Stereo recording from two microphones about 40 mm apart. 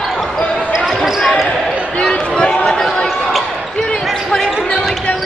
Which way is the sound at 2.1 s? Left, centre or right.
Left.